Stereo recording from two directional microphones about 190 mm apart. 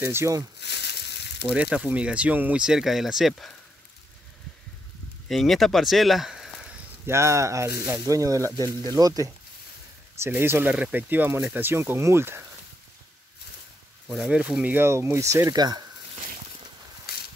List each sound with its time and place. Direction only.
0.0 s speech: 15° right (ahead or behind)
0.6 s a sound: 65° left (ahead or behind)
1.5 s speech: 5° right (ahead or behind)
5.3 s speech: centre (ahead or behind)
14.1 s speech: 5° right (ahead or behind); by 15.8 s 20° right (ahead or behind)
17.1 s a sound: 55° left (ahead or behind)